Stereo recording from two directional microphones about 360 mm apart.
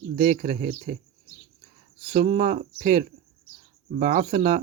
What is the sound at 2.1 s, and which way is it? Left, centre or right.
Speech, centre.